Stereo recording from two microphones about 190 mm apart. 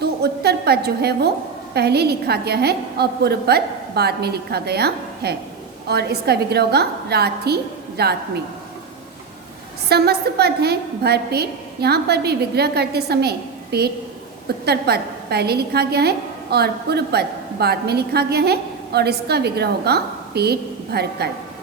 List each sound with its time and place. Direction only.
0.0 s a sound: 60° right (ahead or behind)
1.7 s a woman's voice: 60° right (ahead or behind)
9.9 s a woman's voice: 55° right (ahead or behind)